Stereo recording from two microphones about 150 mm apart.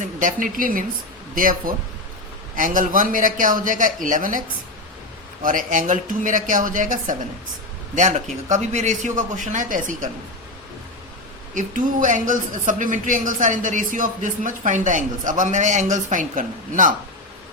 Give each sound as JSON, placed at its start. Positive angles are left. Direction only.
{"t": 0.0, "sound": "speech", "side_deg": -65}
{"t": 11.5, "sound": "speech", "side_deg": -60}